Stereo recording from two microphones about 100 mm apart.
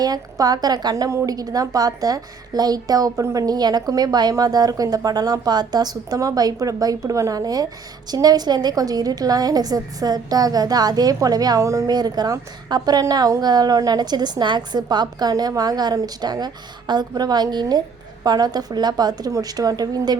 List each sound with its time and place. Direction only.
0.0 s a woman's voice: 40° right (ahead or behind)
11.9 s a woman's voice: 45° right (ahead or behind)